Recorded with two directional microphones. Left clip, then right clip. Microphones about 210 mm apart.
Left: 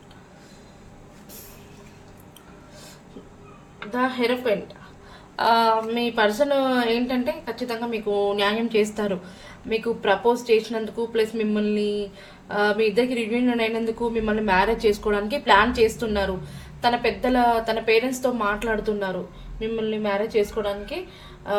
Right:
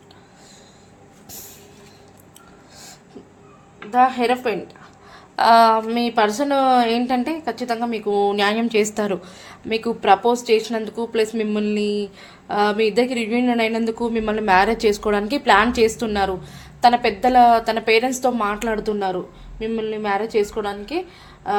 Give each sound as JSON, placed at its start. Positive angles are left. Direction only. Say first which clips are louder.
{"t": 3.9, "sound": "a woman's voice", "louder": "right 7 dB", "side_deg": -40}